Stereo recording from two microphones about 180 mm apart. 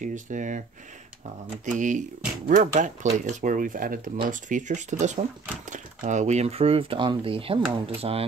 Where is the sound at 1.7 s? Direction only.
45° right (ahead or behind).